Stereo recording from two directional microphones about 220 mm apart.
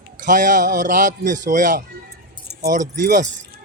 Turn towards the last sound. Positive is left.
turn(degrees=-35)  # may be behind; listen again after turning